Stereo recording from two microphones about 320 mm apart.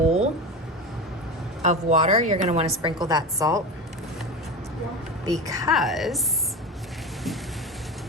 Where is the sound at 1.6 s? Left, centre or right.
Right.